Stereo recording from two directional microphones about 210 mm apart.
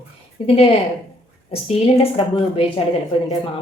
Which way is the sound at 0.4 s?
30° left (ahead or behind).